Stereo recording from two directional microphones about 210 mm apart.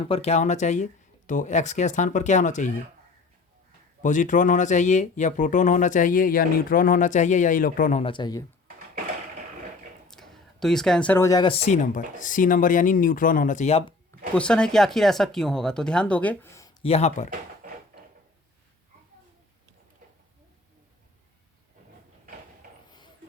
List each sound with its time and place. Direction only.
0.1 s speech: 30° left (ahead or behind)
4.0 s speech: 35° left (ahead or behind)
8.0 s speech: 20° left (ahead or behind)
10.1 s speech: centre (ahead or behind); by 13.9 s 30° left (ahead or behind)
14.3 s speech: 5° left (ahead or behind)
16.8 s speech: 30° left (ahead or behind)